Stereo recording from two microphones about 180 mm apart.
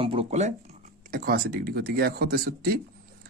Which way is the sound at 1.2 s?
55° right (ahead or behind).